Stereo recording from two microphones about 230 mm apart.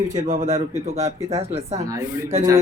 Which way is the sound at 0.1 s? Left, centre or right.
Right.